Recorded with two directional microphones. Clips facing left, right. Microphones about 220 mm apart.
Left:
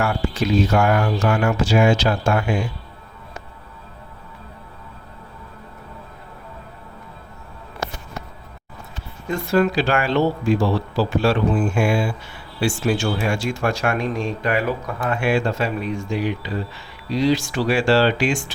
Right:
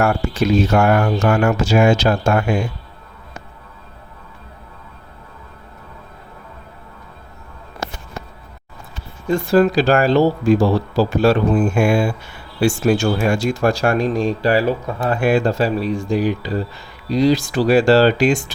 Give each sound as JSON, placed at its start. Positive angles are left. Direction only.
{"t": 0.0, "sound": "speech", "side_deg": -45}
{"t": 9.2, "sound": "speech", "side_deg": -30}